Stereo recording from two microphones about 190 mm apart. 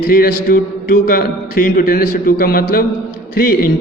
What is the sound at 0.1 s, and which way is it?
A man's voice, 50° left (ahead or behind).